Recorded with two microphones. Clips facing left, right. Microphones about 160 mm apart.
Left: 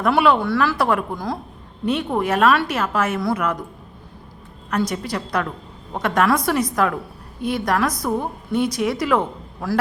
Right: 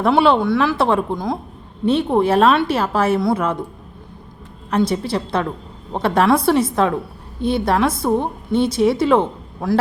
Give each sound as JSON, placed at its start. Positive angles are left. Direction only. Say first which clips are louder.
{"t": 0.0, "sound": "a woman's voice", "louder": "right 3 dB", "side_deg": -30}
{"t": 4.7, "sound": "a woman's voice", "louder": "right 4 dB", "side_deg": -30}